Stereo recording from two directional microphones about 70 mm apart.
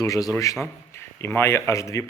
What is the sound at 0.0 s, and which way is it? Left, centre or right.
Speech, left.